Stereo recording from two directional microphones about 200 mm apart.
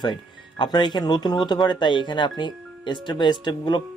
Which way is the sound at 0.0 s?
20° left (ahead or behind).